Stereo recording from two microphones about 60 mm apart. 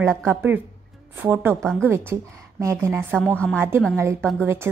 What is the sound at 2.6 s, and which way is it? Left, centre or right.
Speech, right.